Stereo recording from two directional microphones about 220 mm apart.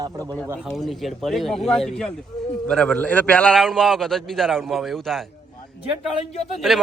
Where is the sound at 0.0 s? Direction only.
15° right (ahead or behind).